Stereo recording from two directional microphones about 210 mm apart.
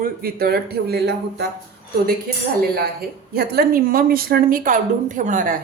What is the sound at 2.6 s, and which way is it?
Speech, 45° right (ahead or behind).